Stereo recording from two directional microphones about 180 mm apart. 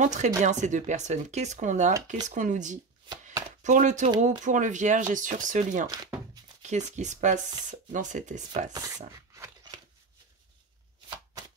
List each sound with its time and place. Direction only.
0.0 s speech: 40° right (ahead or behind)
8.7 s speech: 20° right (ahead or behind)
9.3 s a sound: 20° right (ahead or behind)